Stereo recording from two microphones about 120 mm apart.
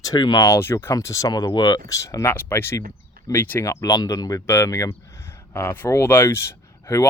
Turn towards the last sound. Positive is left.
turn(degrees=25)  # may be behind; listen again after turning